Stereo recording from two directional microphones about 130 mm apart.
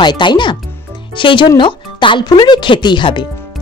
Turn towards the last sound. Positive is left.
turn(degrees=35)  # may be behind; listen again after turning